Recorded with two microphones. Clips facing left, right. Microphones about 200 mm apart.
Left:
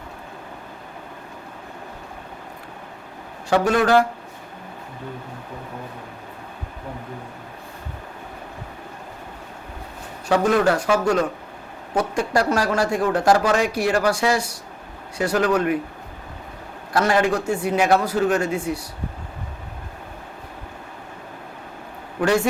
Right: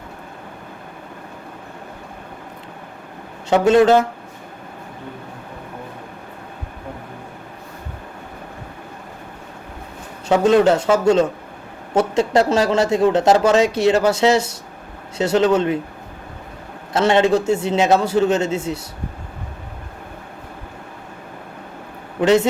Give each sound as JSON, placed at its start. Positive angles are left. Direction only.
{"t": 3.5, "sound": "speech", "side_deg": -25}
{"t": 10.2, "sound": "speech", "side_deg": -25}
{"t": 16.9, "sound": "speech", "side_deg": -25}
{"t": 22.2, "sound": "speech", "side_deg": -20}